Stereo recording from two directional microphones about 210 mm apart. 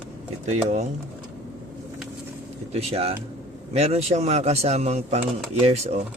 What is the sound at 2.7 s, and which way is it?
A man's voice, 30° right (ahead or behind).